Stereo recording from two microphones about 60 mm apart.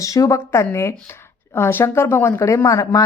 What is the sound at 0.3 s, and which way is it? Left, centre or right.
A woman's voice, left.